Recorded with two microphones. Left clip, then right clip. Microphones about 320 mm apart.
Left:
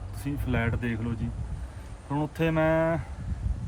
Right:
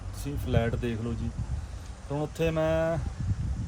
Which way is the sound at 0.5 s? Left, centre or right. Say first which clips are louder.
Right 1 dB; centre.